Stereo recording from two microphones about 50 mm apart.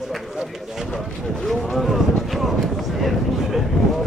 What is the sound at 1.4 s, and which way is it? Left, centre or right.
Boat, centre.